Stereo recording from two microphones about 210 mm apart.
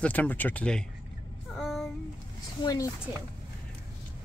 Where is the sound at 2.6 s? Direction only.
20° left (ahead or behind).